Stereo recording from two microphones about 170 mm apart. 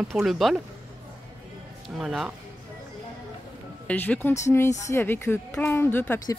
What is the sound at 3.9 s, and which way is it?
Speech, 10° left (ahead or behind).